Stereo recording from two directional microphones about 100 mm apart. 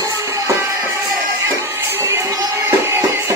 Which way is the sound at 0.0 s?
30° right (ahead or behind).